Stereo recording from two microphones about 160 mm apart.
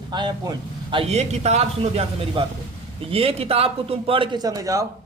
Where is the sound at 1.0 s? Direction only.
45° right (ahead or behind).